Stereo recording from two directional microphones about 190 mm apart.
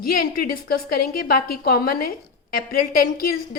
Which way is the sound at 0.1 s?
50° left (ahead or behind).